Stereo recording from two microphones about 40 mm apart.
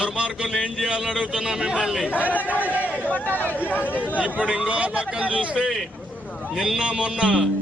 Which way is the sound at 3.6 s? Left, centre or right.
Left.